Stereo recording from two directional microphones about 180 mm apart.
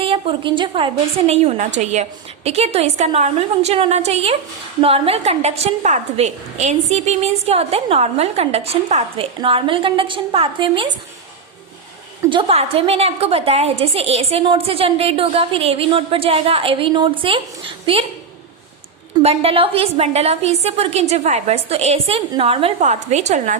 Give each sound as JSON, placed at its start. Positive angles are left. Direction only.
{"t": 0.0, "sound": "a woman's voice", "side_deg": -30}
{"t": 12.3, "sound": "a woman's voice", "side_deg": -30}
{"t": 19.2, "sound": "a woman's voice", "side_deg": -35}